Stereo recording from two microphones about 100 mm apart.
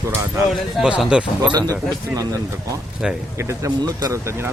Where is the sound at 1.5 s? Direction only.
35° right (ahead or behind).